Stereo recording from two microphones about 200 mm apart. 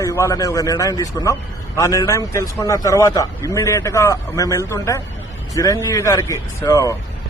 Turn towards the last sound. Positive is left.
turn(degrees=15)  # may be behind; listen again after turning